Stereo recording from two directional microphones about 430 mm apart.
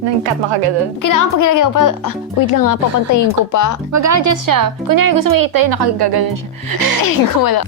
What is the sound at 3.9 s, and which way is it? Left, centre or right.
A woman's voice, right.